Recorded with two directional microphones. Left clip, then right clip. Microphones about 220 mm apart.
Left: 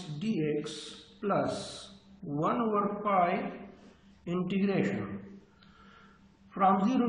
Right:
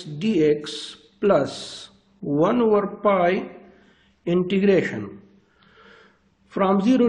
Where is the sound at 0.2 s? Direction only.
45° right (ahead or behind).